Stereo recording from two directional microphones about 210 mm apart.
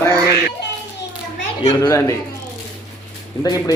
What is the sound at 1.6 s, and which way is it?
Speech, 15° left (ahead or behind).